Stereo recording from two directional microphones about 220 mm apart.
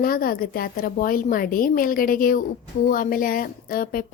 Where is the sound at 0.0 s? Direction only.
40° left (ahead or behind).